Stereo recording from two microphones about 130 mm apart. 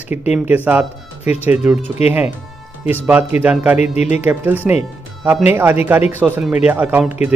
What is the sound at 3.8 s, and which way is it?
Speech, 65° left (ahead or behind).